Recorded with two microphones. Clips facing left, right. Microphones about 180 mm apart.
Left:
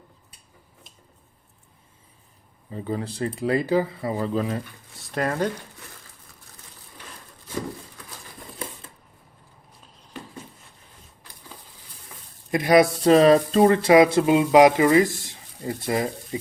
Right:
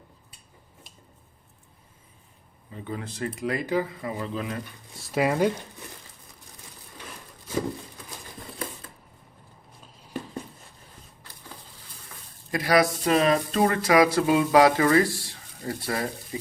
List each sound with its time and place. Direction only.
2.7 s speech: 35° left (ahead or behind)
4.9 s speech: 5° right (ahead or behind)
12.5 s speech: 20° left (ahead or behind)